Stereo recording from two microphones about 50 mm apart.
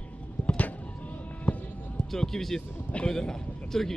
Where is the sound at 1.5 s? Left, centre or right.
Left.